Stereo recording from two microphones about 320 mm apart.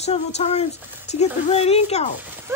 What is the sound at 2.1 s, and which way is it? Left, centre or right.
Speech, centre.